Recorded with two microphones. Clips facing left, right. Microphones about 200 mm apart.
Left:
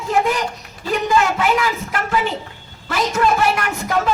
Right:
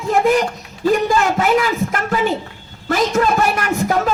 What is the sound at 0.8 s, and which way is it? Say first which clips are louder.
Speech: right 3 dB; 40° right (ahead or behind).